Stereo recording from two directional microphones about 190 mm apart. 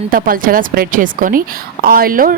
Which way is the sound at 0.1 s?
45° right (ahead or behind).